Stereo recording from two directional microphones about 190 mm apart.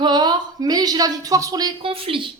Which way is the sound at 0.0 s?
20° right (ahead or behind).